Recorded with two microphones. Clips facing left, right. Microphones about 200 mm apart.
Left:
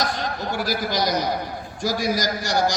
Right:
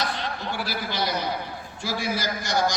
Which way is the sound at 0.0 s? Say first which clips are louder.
Left 4 dB; 45° left (ahead or behind).